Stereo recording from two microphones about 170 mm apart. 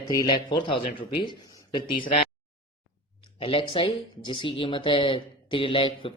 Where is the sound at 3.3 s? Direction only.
30° left (ahead or behind).